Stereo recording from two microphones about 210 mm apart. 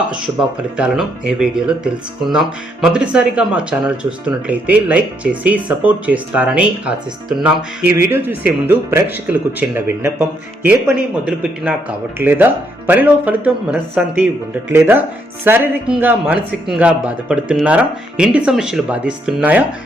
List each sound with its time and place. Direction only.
0.8 s speech: 5° right (ahead or behind)